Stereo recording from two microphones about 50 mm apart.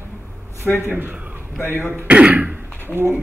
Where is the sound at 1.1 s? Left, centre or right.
Right.